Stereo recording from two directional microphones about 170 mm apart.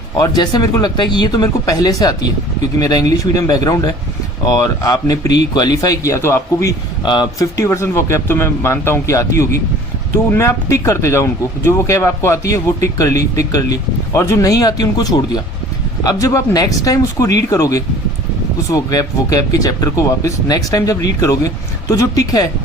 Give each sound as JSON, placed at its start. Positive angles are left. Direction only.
{"t": 0.2, "sound": "speech", "side_deg": 20}